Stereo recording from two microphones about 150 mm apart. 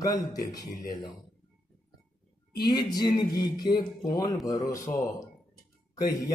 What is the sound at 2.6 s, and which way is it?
Speech, 30° left (ahead or behind).